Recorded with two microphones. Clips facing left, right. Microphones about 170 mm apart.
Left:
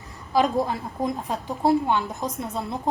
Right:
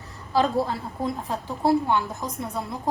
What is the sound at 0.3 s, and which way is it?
A woman's voice, 15° left (ahead or behind).